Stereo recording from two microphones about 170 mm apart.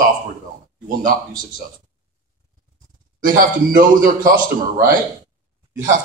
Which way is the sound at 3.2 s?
55° right (ahead or behind).